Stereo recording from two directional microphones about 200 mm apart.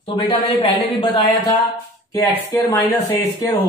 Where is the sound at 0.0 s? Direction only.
30° left (ahead or behind).